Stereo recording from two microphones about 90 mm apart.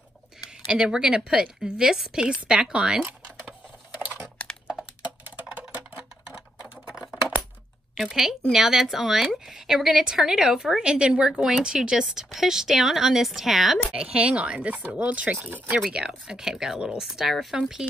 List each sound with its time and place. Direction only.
0.7 s a woman's voice: 10° right (ahead or behind)
4.0 s typing: 25° right (ahead or behind)
7.9 s a woman's voice: 5° right (ahead or behind)